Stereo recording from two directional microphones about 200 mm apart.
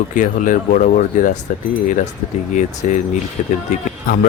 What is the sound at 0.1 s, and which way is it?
Speech, 40° left (ahead or behind).